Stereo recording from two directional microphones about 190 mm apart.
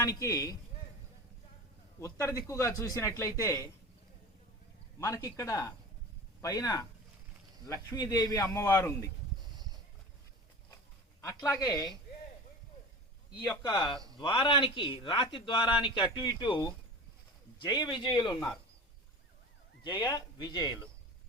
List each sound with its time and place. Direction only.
0.0 s a man's voice: 15° left (ahead or behind)
2.0 s a man's voice: 15° left (ahead or behind)
4.9 s a man's voice: 15° left (ahead or behind)
11.2 s a man's voice: 15° left (ahead or behind)
13.3 s a man's voice: 25° left (ahead or behind)
19.8 s a man's voice: 25° left (ahead or behind)